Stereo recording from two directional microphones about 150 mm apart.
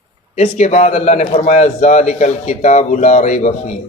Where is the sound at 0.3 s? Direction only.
50° left (ahead or behind).